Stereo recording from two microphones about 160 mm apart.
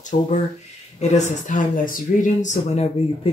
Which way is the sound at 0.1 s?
50° left (ahead or behind).